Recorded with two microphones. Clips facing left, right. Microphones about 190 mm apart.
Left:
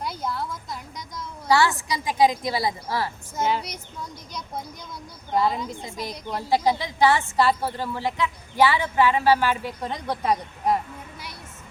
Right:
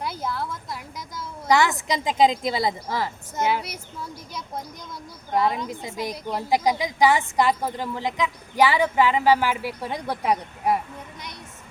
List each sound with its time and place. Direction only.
0.0 s a sound: centre (ahead or behind)
1.5 s a woman's voice: 20° right (ahead or behind)
3.5 s speech: 5° right (ahead or behind)
5.9 s a woman's voice: 15° right (ahead or behind)